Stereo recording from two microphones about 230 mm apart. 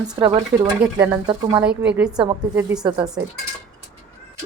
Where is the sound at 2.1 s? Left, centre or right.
Centre.